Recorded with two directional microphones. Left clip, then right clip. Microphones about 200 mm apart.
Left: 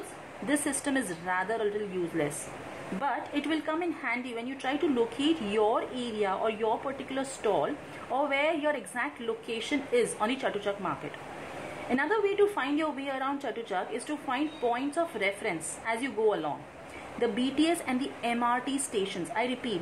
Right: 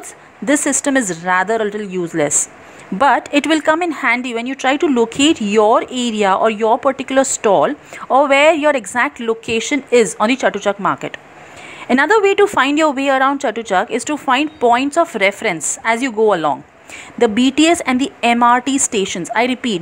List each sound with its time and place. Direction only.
0.5 s speech: 40° right (ahead or behind)